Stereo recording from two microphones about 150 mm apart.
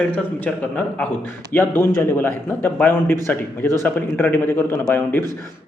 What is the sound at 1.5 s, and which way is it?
A man's voice, 15° left (ahead or behind).